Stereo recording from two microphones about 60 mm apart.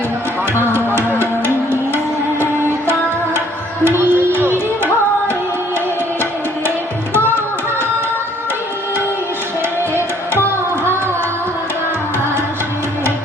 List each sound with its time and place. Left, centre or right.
3.9 s music: right
4.3 s music: left